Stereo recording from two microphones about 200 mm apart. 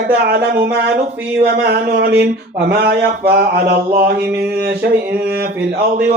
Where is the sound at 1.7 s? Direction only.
55° right (ahead or behind).